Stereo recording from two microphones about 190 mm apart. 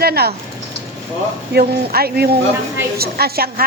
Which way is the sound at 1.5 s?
55° right (ahead or behind).